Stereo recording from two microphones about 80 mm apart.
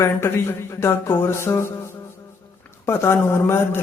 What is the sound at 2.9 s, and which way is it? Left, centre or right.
Speech, left.